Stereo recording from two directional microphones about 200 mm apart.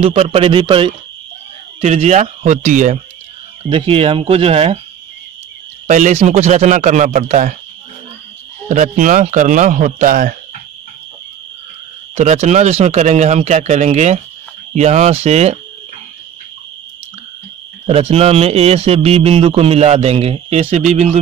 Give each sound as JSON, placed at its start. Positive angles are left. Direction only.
{"t": 0.0, "sound": "speech", "side_deg": -30}
{"t": 3.6, "sound": "speech", "side_deg": -25}
{"t": 5.9, "sound": "speech", "side_deg": -40}
{"t": 8.6, "sound": "speech", "side_deg": -40}
{"t": 12.2, "sound": "speech", "side_deg": -35}
{"t": 17.8, "sound": "speech", "side_deg": -30}